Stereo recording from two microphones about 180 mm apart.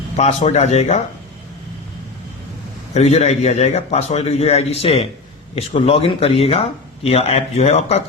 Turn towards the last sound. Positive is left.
turn(degrees=35)  # may be behind; listen again after turning